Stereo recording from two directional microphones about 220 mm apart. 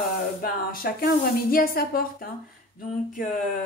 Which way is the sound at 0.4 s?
40° left (ahead or behind).